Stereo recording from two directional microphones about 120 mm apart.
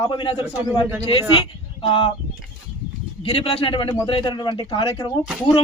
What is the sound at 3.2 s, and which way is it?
A man's voice, 50° left (ahead or behind).